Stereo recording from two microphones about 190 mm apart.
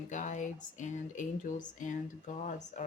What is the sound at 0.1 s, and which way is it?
Speech, 40° left (ahead or behind).